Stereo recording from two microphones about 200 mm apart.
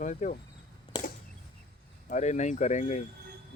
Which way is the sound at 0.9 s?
25° left (ahead or behind).